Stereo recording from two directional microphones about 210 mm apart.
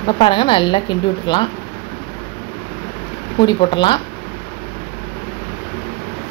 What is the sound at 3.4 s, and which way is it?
Speech, 20° left (ahead or behind).